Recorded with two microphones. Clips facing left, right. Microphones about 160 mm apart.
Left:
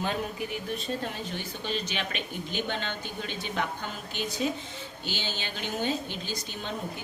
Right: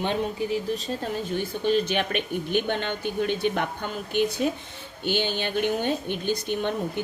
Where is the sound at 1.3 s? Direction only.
50° right (ahead or behind).